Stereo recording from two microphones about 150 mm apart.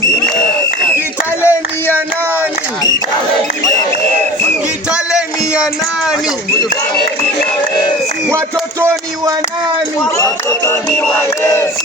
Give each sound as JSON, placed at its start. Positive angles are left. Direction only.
{"t": 1.4, "sound": "a sound", "side_deg": 15}
{"t": 4.9, "sound": "music", "side_deg": -5}
{"t": 10.2, "sound": "speech", "side_deg": 20}
{"t": 10.9, "sound": "battle cry", "side_deg": 15}